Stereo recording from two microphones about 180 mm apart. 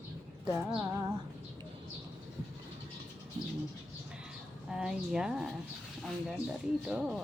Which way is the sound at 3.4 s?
30° right (ahead or behind).